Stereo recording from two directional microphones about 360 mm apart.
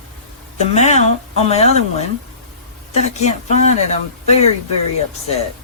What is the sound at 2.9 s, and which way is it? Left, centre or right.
Speech, centre.